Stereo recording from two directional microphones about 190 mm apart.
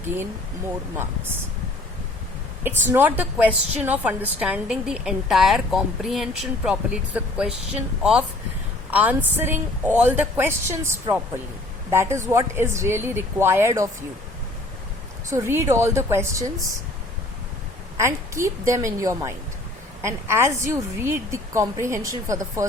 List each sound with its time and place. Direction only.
0.0 s speech: 10° right (ahead or behind)
2.6 s a woman's voice: 10° right (ahead or behind)
8.9 s a woman's voice: 10° right (ahead or behind)
15.3 s a woman's voice: 15° right (ahead or behind)
17.9 s a woman's voice: 15° right (ahead or behind)